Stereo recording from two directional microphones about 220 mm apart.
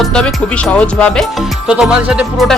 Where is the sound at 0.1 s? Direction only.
5° left (ahead or behind).